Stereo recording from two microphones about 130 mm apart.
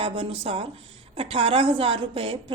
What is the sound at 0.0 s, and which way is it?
A woman's voice, 45° right (ahead or behind).